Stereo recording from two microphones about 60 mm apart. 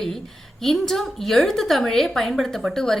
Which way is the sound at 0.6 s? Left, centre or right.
Centre.